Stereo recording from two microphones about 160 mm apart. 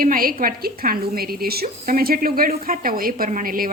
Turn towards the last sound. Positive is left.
turn(degrees=-60)  # may be behind; listen again after turning